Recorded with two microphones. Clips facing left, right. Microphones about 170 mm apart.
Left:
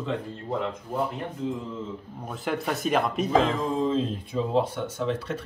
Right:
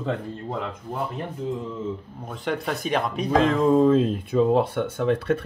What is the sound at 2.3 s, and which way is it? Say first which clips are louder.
Speech: right 1 dB; centre (ahead or behind).